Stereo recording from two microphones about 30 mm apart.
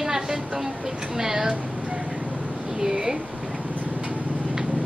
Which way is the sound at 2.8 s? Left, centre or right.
Centre.